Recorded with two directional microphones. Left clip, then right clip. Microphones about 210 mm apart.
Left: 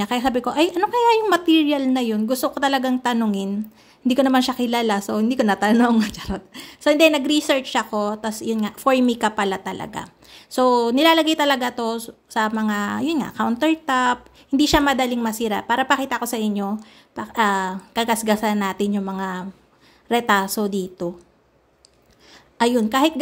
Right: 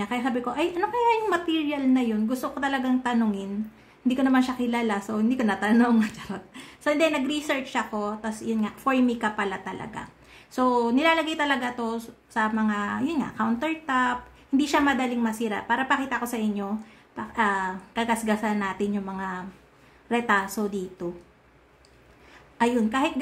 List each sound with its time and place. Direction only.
0.0 s a woman's voice: 45° left (ahead or behind)
22.6 s a woman's voice: 40° left (ahead or behind)